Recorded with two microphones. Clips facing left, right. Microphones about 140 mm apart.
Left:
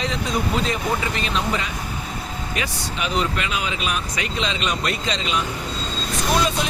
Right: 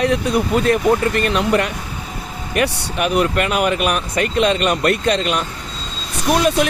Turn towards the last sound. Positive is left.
turn(degrees=-65)  # may be behind; listen again after turning